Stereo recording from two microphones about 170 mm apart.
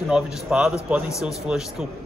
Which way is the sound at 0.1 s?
5° right (ahead or behind).